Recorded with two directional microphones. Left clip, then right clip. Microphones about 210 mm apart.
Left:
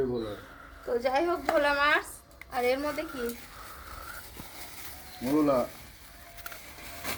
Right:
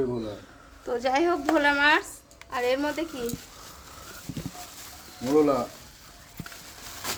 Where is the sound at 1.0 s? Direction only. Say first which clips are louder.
Right 4 dB; 45° right (ahead or behind).